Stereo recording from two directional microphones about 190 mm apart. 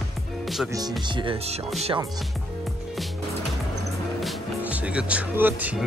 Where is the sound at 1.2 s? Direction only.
30° right (ahead or behind).